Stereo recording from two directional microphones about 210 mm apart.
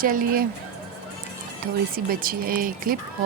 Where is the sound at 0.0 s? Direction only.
40° right (ahead or behind).